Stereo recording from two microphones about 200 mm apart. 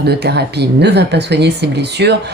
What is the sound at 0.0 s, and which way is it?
Speech, 55° right (ahead or behind).